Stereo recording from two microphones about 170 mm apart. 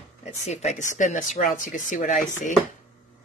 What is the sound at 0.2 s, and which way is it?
Speech, 40° left (ahead or behind).